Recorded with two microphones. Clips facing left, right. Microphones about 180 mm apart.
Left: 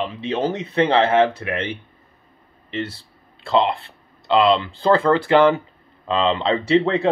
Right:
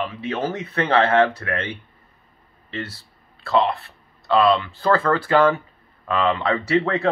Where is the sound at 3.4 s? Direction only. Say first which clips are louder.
Left 1 dB; 25° left (ahead or behind).